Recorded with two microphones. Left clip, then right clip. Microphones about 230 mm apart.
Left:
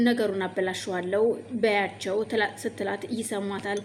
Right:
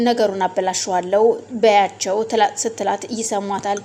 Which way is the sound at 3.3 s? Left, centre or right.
Right.